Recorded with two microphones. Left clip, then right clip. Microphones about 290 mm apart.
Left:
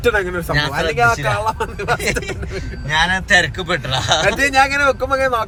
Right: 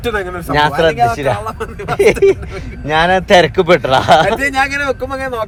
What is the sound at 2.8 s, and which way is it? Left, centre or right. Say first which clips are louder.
A man's voice: right 5 dB; centre.